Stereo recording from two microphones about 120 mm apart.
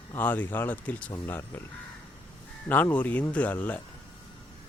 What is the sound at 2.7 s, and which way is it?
Speech, 15° left (ahead or behind).